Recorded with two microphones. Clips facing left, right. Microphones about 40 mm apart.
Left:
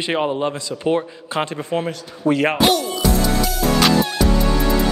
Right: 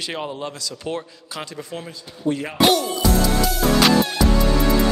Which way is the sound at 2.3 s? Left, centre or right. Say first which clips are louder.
Left 9 dB; left.